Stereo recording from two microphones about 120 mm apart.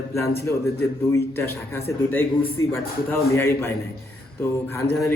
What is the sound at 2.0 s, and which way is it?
A man's voice, 20° left (ahead or behind).